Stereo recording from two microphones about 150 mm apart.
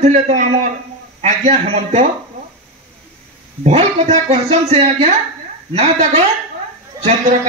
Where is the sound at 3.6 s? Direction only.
50° right (ahead or behind).